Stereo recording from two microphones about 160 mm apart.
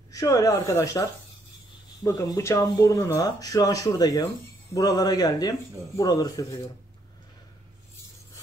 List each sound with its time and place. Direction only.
0.1 s speech: 20° left (ahead or behind)
2.0 s speech: 25° left (ahead or behind)